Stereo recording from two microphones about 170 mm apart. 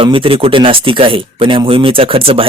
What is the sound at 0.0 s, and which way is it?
Speech, 30° right (ahead or behind).